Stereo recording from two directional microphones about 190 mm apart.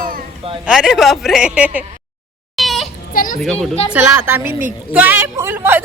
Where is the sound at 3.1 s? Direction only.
45° left (ahead or behind).